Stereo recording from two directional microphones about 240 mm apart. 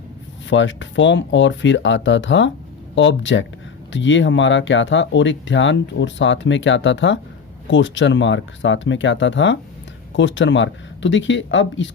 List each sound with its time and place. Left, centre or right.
0.5 s speech: left